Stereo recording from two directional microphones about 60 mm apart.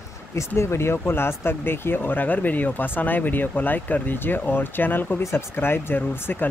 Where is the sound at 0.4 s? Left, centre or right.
Left.